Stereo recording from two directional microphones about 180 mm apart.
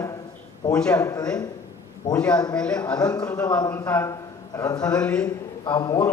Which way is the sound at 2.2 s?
5° left (ahead or behind).